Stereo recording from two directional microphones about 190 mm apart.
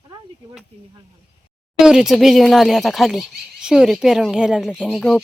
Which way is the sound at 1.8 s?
5° right (ahead or behind).